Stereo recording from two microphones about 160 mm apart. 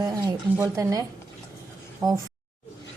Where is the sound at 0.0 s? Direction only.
25° right (ahead or behind).